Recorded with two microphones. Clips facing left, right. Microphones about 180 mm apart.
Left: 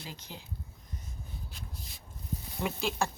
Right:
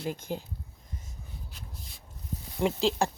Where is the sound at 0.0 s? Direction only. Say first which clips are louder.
Right 12 dB; 50° right (ahead or behind).